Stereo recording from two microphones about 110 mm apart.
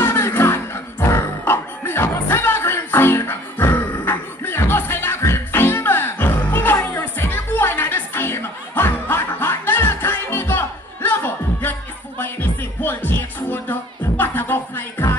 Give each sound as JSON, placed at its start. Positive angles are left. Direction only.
{"t": 0.0, "sound": "music", "side_deg": 25}